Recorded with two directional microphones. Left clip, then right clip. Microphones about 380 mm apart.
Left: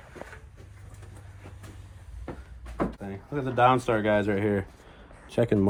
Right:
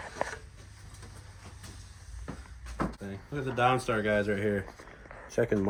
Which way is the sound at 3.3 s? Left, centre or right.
Centre.